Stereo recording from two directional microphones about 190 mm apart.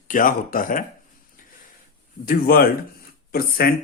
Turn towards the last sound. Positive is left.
turn(degrees=55)  # may be behind; listen again after turning